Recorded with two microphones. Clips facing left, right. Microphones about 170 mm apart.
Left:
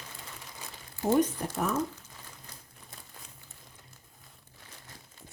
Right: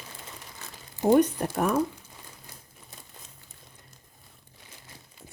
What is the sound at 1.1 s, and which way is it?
Speech, 65° right (ahead or behind).